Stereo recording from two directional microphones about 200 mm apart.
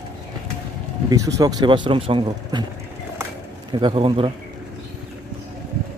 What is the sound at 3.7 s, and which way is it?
Speech, 25° right (ahead or behind).